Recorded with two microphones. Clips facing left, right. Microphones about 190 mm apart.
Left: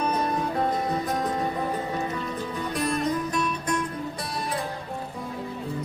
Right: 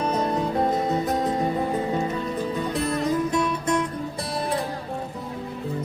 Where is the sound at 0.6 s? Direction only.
25° right (ahead or behind).